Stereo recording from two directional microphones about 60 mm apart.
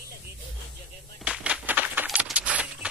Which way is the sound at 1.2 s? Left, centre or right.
Right.